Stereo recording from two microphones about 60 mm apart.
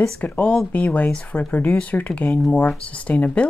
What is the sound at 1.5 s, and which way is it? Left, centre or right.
Speech, left.